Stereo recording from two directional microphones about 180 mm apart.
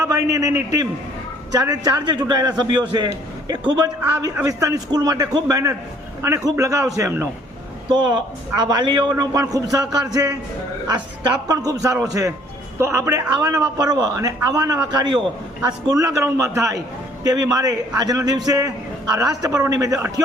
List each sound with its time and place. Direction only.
0.0 s a man's voice: 20° right (ahead or behind)
11.4 s a man's voice: 20° right (ahead or behind)